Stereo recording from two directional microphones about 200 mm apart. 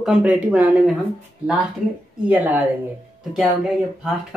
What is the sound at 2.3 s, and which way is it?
Speech, 10° right (ahead or behind).